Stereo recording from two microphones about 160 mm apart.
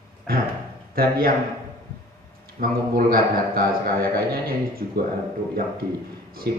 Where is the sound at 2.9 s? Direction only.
70° right (ahead or behind).